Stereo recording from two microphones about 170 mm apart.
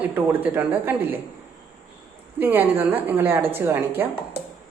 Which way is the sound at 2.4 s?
10° right (ahead or behind).